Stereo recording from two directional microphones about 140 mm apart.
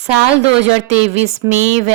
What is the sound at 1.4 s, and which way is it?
Speech, 25° right (ahead or behind).